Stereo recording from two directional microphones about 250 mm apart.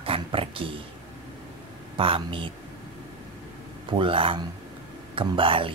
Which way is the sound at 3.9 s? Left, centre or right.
Right.